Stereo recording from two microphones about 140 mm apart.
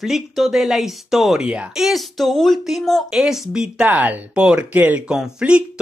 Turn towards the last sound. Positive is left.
turn(degrees=-5)  # may be behind; listen again after turning